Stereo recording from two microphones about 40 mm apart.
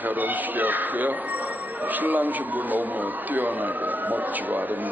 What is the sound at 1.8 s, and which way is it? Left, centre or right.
Speech, right.